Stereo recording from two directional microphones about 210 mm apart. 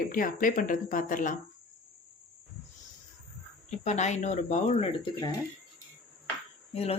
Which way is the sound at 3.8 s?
35° left (ahead or behind).